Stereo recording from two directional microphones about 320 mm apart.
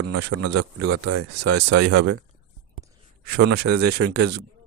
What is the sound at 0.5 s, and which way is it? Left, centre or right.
Speech, right.